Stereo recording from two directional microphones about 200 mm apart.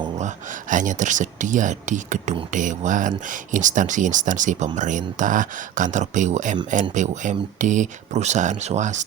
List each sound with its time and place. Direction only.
0.7 s speech: 40° right (ahead or behind)